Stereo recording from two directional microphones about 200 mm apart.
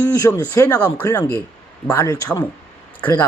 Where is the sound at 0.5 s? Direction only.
15° left (ahead or behind).